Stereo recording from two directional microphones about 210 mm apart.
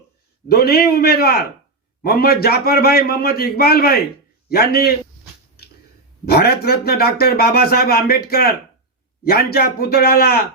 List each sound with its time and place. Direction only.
0.4 s speech: 50° left (ahead or behind)
6.2 s speech: 50° left (ahead or behind)